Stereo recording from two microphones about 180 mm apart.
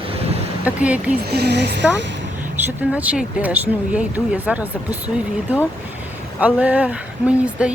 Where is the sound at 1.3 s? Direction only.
65° right (ahead or behind).